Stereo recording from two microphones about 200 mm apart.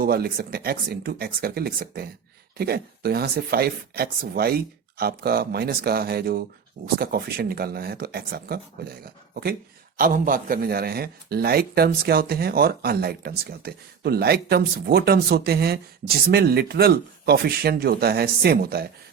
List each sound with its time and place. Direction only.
0.0 s a man's voice: 50° right (ahead or behind)